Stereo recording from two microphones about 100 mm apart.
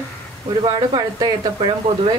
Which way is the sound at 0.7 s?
45° right (ahead or behind).